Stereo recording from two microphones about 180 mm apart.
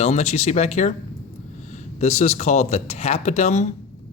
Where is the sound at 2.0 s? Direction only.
40° left (ahead or behind).